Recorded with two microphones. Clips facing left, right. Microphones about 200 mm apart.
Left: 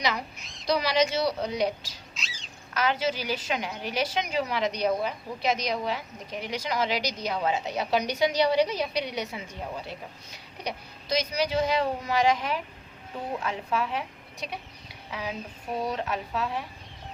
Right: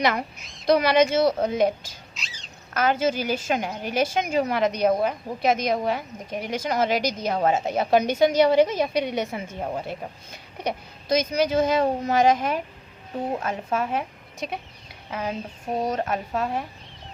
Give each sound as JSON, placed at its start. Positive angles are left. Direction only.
{"t": 0.0, "sound": "a woman's voice", "side_deg": -55}
{"t": 2.1, "sound": "duck", "side_deg": 0}
{"t": 2.7, "sound": "a woman's voice", "side_deg": -50}